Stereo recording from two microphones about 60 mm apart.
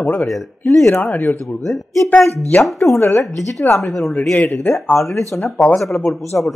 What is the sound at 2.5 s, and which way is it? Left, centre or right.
Speech, left.